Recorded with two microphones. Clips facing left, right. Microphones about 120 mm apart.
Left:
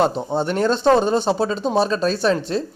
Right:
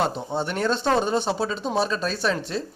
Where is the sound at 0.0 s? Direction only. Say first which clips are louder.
Left 6 dB; 30° left (ahead or behind).